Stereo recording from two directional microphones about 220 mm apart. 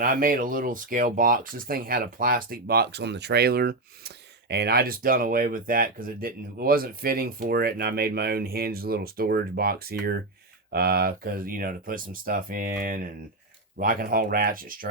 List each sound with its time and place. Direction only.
0.0 s speech: 40° right (ahead or behind)